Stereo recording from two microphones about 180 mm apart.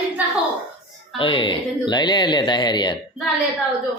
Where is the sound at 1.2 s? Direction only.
25° left (ahead or behind).